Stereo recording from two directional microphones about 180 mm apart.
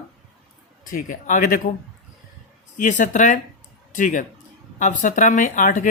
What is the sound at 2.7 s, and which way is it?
Speech, 45° left (ahead or behind).